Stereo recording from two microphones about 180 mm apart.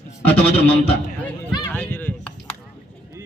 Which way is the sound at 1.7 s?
10° left (ahead or behind).